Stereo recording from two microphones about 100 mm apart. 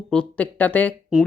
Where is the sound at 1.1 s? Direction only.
10° right (ahead or behind).